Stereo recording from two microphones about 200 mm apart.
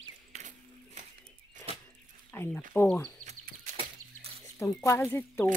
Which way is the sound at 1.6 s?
15° left (ahead or behind).